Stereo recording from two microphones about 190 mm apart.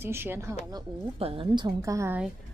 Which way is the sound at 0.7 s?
30° right (ahead or behind).